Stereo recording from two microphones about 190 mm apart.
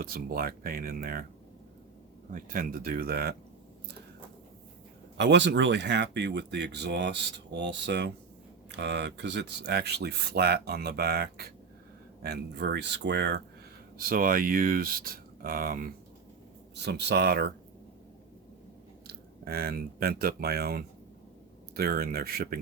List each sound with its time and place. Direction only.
0.0 s speech: 50° right (ahead or behind)
2.3 s speech: 45° right (ahead or behind)
5.1 s speech: 65° right (ahead or behind)
14.0 s speech: 50° right (ahead or behind)
16.7 s speech: 60° right (ahead or behind)
19.0 s speech: 55° right (ahead or behind)